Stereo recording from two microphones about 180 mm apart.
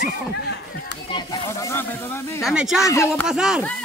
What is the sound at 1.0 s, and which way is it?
Speech, 25° left (ahead or behind).